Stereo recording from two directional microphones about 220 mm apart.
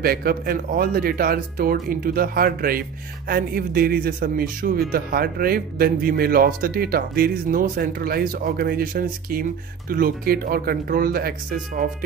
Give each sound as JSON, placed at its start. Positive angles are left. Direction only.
{"t": 0.0, "sound": "a man's voice", "side_deg": -45}